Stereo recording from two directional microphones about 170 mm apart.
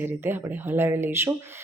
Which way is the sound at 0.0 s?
15° right (ahead or behind).